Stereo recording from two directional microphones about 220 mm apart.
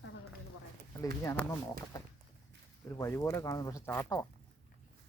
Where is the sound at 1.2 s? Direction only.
10° left (ahead or behind).